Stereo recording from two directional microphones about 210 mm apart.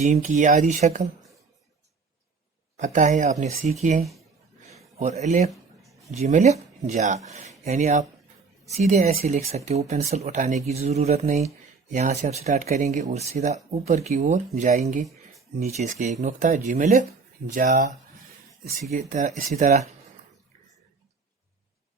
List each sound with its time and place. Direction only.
0.0 s speech: 35° right (ahead or behind)
2.7 s speech: 35° right (ahead or behind)
5.5 s a sound: centre (ahead or behind)
6.1 s speech: 35° right (ahead or behind)
15.0 s a sound: centre (ahead or behind)
15.6 s speech: 35° right (ahead or behind)